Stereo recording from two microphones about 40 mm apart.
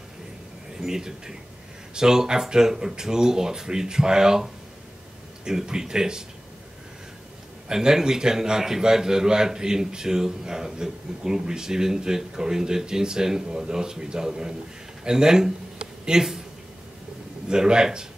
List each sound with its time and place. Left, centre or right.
0.8 s a man's voice: centre
7.6 s a man's voice: centre
17.5 s speech: centre